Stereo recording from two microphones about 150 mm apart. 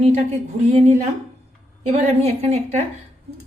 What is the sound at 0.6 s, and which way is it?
A woman's voice, 45° right (ahead or behind).